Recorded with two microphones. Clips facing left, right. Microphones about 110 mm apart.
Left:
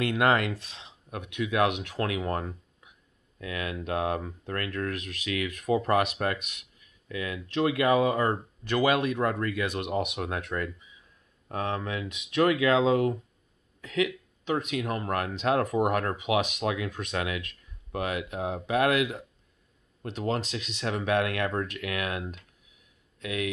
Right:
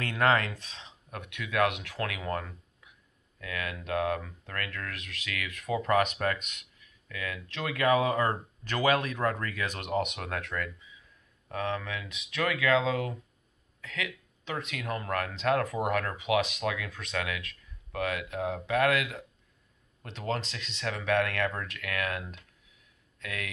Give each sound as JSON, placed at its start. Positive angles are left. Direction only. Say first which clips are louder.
{"t": 0.1, "sound": "speech", "louder": "right 1 dB", "side_deg": 20}
{"t": 0.5, "sound": "speech", "louder": "left 6 dB", "side_deg": 10}
{"t": 1.1, "sound": "speech", "louder": "left 3 dB", "side_deg": 20}
{"t": 13.7, "sound": "a sound", "louder": "left 10 dB", "side_deg": 20}
{"t": 14.6, "sound": "speech", "louder": "left 5 dB", "side_deg": 15}
{"t": 16.6, "sound": "speech", "louder": "left 3 dB", "side_deg": 25}